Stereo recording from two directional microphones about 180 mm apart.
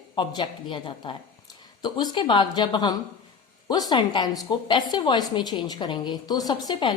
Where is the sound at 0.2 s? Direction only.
25° left (ahead or behind).